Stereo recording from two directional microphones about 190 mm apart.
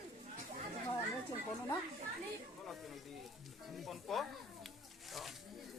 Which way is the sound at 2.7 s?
Centre (ahead or behind).